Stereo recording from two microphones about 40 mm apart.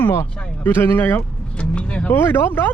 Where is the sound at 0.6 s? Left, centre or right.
Left.